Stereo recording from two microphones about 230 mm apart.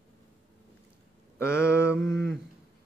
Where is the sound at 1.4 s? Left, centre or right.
Centre.